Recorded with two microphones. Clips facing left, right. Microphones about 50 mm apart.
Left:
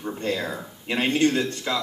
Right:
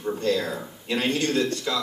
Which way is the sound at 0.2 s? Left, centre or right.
Left.